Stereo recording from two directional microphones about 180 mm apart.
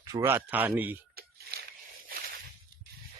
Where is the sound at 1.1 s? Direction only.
60° right (ahead or behind).